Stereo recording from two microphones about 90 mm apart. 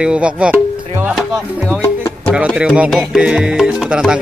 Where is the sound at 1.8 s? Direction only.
30° left (ahead or behind).